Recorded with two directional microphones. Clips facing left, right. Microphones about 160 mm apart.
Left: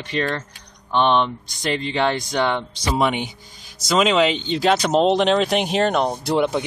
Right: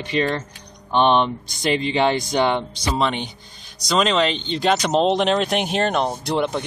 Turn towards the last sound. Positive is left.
turn(degrees=5)  # may be behind; listen again after turning